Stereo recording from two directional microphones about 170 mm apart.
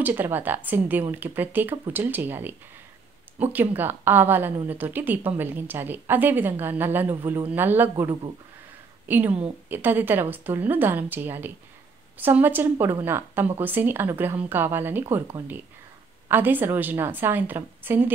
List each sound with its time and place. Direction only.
0.0 s a woman's voice: 10° right (ahead or behind)
3.5 s a woman's voice: 10° right (ahead or behind)
7.9 s speech: 25° right (ahead or behind)
9.0 s a woman's voice: 10° right (ahead or behind)